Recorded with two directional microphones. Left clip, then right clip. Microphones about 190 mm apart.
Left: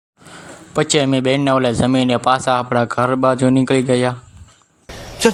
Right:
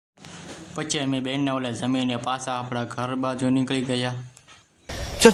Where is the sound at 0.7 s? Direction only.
35° left (ahead or behind).